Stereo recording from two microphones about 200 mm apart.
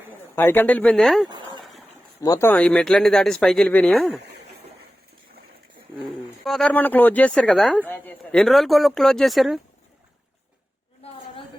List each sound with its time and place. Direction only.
0.1 s speech: 10° left (ahead or behind)
2.2 s speech: 15° left (ahead or behind)
4.2 s speech: 55° right (ahead or behind)
6.4 s speech: 5° left (ahead or behind)